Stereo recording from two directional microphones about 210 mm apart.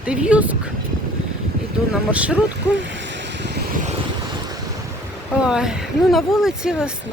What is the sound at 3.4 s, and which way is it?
Vehicle, 50° right (ahead or behind).